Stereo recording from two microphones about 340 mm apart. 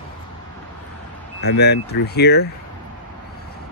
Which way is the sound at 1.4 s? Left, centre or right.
Left.